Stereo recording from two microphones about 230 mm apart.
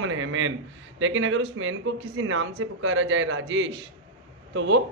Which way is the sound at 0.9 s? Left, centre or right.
Right.